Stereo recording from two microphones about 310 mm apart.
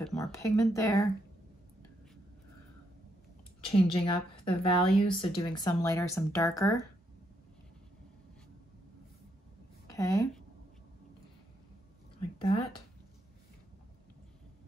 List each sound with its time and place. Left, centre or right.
0.0 s speech: centre
3.6 s speech: centre
9.9 s speech: centre
12.4 s speech: centre